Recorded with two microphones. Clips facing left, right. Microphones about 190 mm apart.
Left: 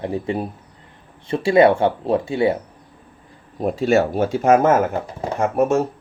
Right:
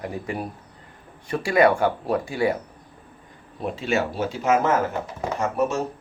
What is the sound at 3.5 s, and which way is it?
Speech, 40° left (ahead or behind).